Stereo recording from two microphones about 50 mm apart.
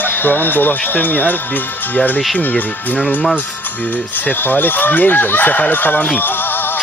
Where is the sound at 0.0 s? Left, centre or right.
Left.